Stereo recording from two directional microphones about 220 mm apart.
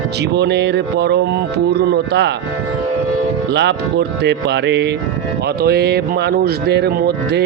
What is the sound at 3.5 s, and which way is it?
A man's voice, 50° right (ahead or behind).